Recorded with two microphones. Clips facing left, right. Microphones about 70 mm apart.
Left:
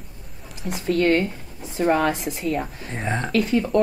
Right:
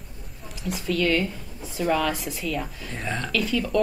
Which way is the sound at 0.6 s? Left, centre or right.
Left.